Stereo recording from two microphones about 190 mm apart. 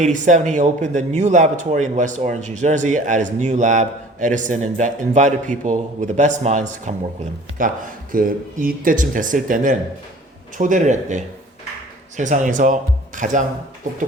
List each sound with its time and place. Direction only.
0.0 s speech: 40° right (ahead or behind)